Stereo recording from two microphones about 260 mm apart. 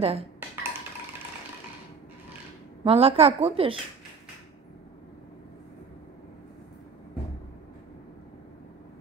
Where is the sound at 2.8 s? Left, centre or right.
Right.